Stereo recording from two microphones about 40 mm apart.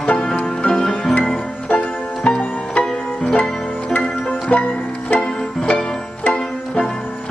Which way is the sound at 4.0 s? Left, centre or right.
Left.